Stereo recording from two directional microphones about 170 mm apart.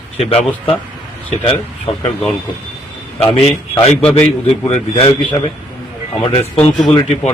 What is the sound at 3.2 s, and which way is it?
A man's voice, 35° left (ahead or behind).